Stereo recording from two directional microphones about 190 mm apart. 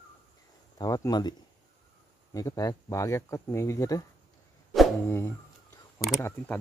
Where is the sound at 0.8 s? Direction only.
20° left (ahead or behind).